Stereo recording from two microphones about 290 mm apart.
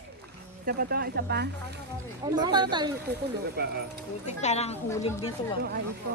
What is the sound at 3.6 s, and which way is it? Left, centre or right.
Speech, right.